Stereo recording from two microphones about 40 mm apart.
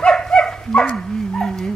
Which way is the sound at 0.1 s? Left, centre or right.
Centre.